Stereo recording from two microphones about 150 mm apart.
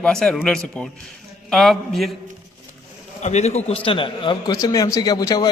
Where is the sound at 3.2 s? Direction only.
50° left (ahead or behind).